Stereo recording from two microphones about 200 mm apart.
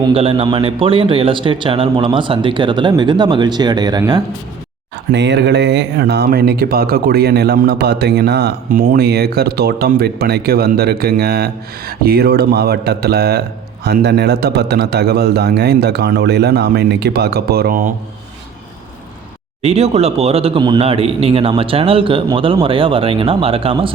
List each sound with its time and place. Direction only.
0.1 s speech: 30° right (ahead or behind)
5.1 s speech: 60° right (ahead or behind); by 17.9 s 45° right (ahead or behind)
19.6 s speech: 30° right (ahead or behind)